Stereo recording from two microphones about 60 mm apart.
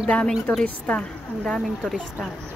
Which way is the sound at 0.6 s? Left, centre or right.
Centre.